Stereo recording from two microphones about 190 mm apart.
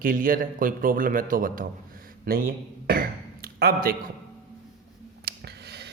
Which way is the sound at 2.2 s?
50° right (ahead or behind).